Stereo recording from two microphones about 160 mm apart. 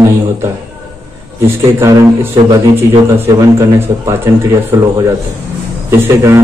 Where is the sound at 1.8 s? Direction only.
20° right (ahead or behind).